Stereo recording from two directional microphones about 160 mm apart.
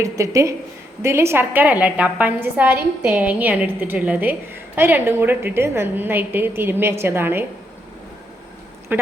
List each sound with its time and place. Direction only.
0.0 s a woman's voice: 20° right (ahead or behind)
8.9 s speech: 15° right (ahead or behind)